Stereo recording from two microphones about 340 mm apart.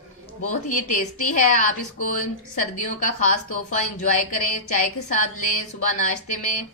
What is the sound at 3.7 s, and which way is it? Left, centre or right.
A woman's voice, left.